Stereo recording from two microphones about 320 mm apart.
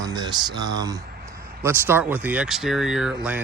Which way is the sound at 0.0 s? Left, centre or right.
Centre.